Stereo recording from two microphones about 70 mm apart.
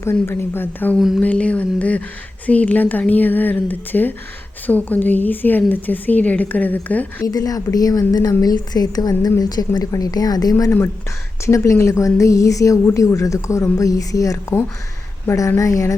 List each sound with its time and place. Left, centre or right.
0.0 s a woman's voice: left
0.9 s speech: centre
1.2 s a woman's voice: centre
7.3 s a woman's voice: left
11.4 s speech: left
15.3 s speech: left